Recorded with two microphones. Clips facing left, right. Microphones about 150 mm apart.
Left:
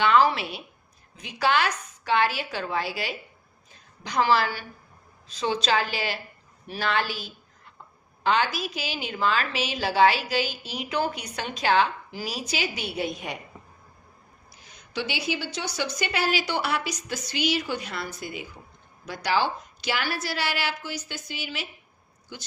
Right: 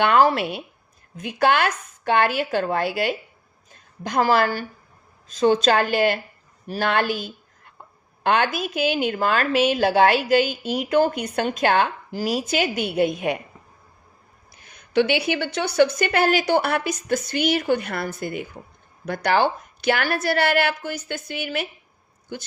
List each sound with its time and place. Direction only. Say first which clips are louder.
0.0 s a woman's voice: right 3 dB; 55° right (ahead or behind)
14.5 s a woman's voice: right 13 dB; 55° right (ahead or behind)